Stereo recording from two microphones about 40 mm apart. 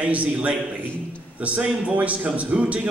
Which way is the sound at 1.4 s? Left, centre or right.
Right.